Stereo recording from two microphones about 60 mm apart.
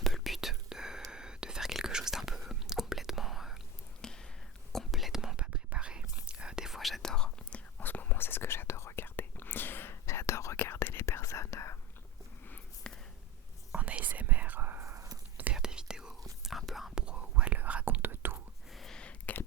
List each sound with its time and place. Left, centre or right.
0.0 s whispering: centre
4.0 s whispering: centre
5.4 s whispering: centre
7.8 s whispering: left
9.0 s whispering: left
10.6 s whispering: left
12.9 s a sound: centre
13.7 s whispering: right
14.8 s whispering: right
15.5 s whispering: centre
17.1 s whispering: centre; by 18.4 s right
18.7 s a sound: centre
18.9 s a sound: left